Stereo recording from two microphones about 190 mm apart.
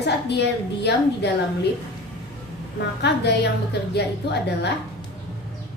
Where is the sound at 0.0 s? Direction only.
60° left (ahead or behind).